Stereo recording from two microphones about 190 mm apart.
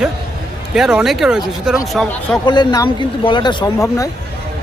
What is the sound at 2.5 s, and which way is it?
Speech, 20° left (ahead or behind).